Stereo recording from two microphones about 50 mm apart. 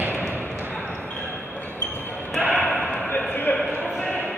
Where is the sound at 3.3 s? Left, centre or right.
Left.